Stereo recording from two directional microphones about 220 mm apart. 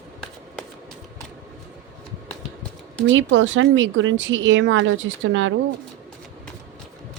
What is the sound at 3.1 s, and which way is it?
Speech, 60° right (ahead or behind).